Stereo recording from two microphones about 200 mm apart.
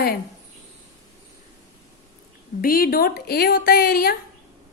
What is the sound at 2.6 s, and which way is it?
A woman's voice, 45° left (ahead or behind).